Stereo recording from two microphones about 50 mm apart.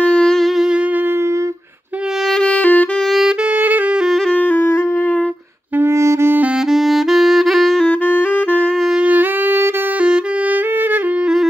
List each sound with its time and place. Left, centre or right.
0.0 s wind instrument: centre
2.4 s saxophone: left
5.8 s music: right
6.7 s saxophone: centre
8.1 s saxophone: left
9.0 s music: right